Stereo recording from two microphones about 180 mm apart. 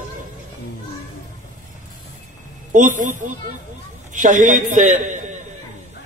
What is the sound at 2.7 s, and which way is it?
A man's voice, 45° right (ahead or behind).